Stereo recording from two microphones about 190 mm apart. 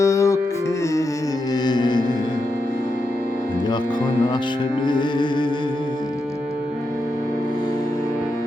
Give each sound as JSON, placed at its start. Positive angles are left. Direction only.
{"t": 0.0, "sound": "music", "side_deg": 15}
{"t": 1.6, "sound": "music", "side_deg": 20}
{"t": 4.9, "sound": "music", "side_deg": 25}